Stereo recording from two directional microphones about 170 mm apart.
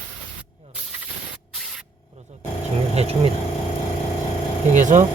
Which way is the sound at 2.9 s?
40° right (ahead or behind).